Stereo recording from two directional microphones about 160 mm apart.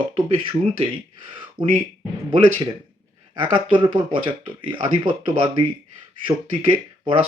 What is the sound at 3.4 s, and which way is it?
Speech, 30° right (ahead or behind).